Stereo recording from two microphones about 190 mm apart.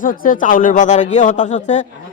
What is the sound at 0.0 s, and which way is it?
A man's voice, 45° left (ahead or behind).